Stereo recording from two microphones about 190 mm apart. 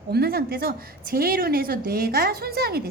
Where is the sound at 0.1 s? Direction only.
55° right (ahead or behind).